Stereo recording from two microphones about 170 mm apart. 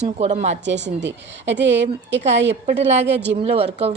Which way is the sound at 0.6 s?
90° right.